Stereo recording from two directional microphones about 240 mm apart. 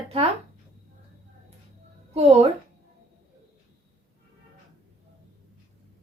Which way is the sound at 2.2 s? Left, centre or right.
Right.